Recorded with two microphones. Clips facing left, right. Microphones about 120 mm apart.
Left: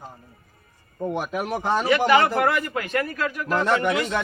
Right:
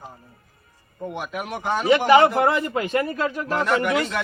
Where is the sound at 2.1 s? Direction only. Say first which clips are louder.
Right 5 dB; 25° right (ahead or behind).